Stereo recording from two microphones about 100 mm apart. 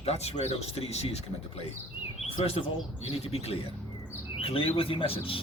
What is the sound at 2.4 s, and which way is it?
Speech, 70° left (ahead or behind).